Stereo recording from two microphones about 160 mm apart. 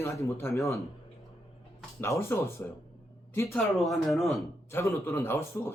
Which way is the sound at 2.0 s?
15° left (ahead or behind).